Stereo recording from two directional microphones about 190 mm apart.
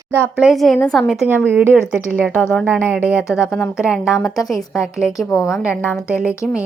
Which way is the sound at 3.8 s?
Centre (ahead or behind).